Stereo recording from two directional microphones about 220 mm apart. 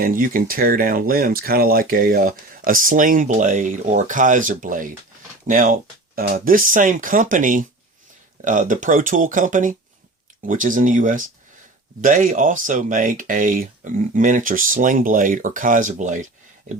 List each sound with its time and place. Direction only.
0.0 s speech: 40° right (ahead or behind)